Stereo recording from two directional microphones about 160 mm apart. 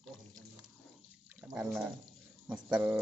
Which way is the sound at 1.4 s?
5° right (ahead or behind).